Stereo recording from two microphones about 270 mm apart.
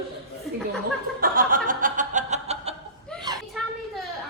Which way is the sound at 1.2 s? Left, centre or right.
Right.